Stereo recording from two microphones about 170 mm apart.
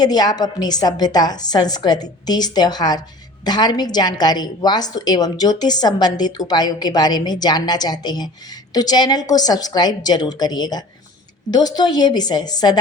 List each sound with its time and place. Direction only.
0.0 s a woman's voice: 25° left (ahead or behind)